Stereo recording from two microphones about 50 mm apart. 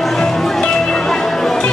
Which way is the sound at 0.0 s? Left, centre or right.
Centre.